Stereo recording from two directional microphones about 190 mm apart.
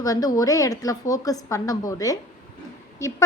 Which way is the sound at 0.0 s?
20° left (ahead or behind).